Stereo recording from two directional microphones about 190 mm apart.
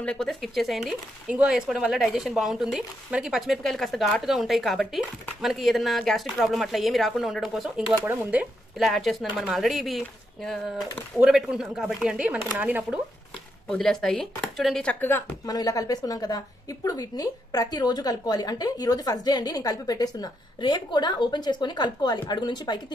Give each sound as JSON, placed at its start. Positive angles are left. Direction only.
{"t": 0.0, "sound": "speech", "side_deg": 5}
{"t": 13.7, "sound": "speech", "side_deg": 0}